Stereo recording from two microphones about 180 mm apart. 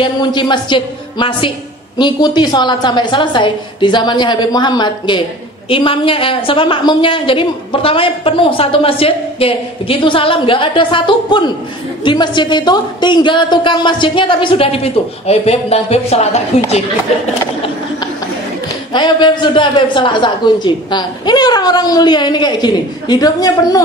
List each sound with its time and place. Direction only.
0.0 s a woman's voice: 25° left (ahead or behind)
17.3 s a sound: 30° left (ahead or behind)
18.9 s a woman's voice: 25° left (ahead or behind)